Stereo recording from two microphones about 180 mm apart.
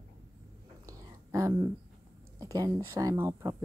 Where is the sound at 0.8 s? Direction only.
20° right (ahead or behind).